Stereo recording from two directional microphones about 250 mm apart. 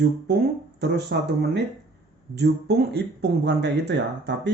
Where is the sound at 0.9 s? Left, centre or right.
Right.